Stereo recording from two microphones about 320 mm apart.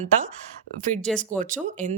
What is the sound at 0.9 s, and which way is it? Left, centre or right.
Speech, centre.